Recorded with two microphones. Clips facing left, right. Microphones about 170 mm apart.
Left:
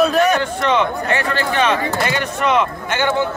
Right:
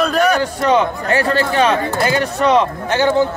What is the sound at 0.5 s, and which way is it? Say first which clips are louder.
Speech: right 2 dB; 35° right (ahead or behind).